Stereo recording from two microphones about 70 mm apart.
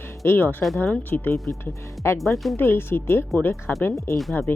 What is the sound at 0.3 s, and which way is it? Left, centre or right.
Speech, left.